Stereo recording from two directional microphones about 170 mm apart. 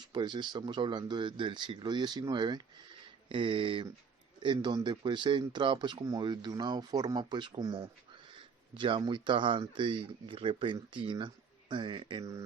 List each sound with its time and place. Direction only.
0.1 s speech: 25° right (ahead or behind)